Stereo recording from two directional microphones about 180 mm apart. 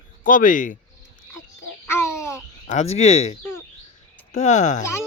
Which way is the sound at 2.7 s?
40° left (ahead or behind).